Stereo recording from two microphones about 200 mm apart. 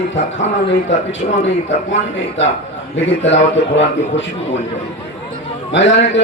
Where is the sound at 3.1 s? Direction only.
65° left (ahead or behind).